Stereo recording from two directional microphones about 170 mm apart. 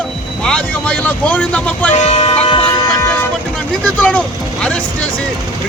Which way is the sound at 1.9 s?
40° left (ahead or behind).